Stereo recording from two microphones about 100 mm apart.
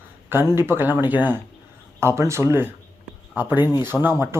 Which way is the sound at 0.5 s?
25° right (ahead or behind).